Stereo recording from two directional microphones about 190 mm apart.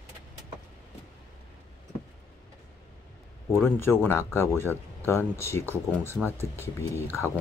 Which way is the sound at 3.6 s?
10° left (ahead or behind).